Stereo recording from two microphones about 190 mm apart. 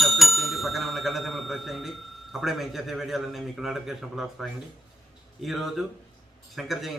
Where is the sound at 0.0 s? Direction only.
Centre (ahead or behind).